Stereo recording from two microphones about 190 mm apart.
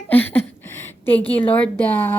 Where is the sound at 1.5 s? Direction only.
10° left (ahead or behind).